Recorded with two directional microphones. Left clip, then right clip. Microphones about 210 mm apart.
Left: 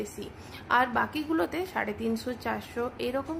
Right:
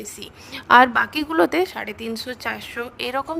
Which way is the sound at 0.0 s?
50° right (ahead or behind).